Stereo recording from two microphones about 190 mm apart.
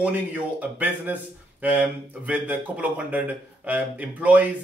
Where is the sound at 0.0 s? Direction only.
10° right (ahead or behind).